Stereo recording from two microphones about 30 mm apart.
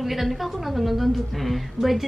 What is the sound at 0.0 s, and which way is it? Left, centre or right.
A woman's voice, centre.